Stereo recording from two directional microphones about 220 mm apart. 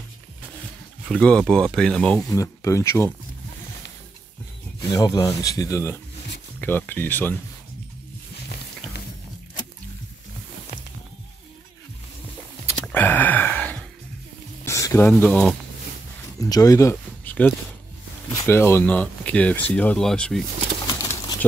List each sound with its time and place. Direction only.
1.1 s speech: 5° left (ahead or behind)
2.2 s speech: 15° left (ahead or behind)
4.9 s speech: 15° left (ahead or behind)
12.8 s a sound: 10° left (ahead or behind)
16.3 s speech: 15° left (ahead or behind)
20.8 s bird: 15° left (ahead or behind)